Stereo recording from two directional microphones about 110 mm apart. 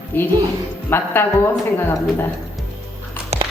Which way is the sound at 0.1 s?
15° left (ahead or behind).